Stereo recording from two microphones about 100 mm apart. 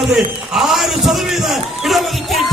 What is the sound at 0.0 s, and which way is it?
A man's voice, 5° right (ahead or behind).